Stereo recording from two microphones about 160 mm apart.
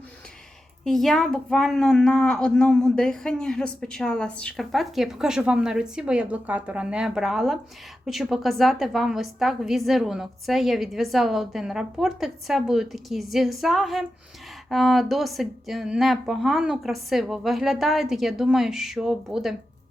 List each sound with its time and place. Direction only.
0.9 s a woman's voice: centre (ahead or behind)